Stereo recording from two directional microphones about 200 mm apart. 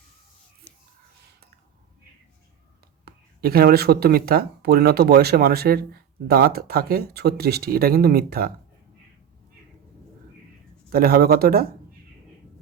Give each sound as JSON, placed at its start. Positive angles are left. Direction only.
{"t": 0.7, "sound": "whispering", "side_deg": 5}
{"t": 3.0, "sound": "speech", "side_deg": -50}
{"t": 10.8, "sound": "speech", "side_deg": -50}